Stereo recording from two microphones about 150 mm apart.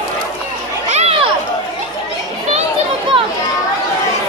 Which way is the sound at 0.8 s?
45° right (ahead or behind).